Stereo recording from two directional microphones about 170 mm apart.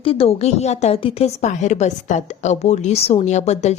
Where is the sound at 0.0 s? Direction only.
35° left (ahead or behind).